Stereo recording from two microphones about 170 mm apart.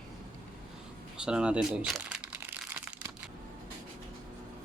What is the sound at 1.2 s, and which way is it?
Crumpling, 5° right (ahead or behind).